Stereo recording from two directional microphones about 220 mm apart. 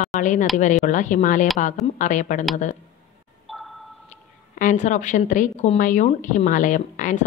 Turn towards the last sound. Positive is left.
turn(degrees=35)  # may be behind; listen again after turning